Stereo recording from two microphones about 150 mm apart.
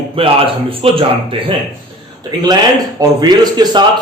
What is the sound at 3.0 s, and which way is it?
Speech, 30° right (ahead or behind).